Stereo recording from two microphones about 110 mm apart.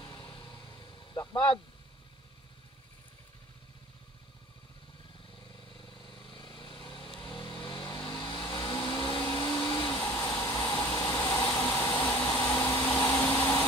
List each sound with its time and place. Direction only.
0.0 s vehicle: 35° left (ahead or behind)
6.0 s vehicle: 45° left (ahead or behind); by 9.1 s 30° left (ahead or behind)
9.2 s vacuum cleaner: 25° left (ahead or behind)
9.7 s vehicle: 25° left (ahead or behind)